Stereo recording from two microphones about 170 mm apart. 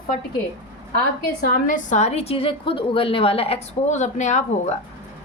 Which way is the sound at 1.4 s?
50° left (ahead or behind).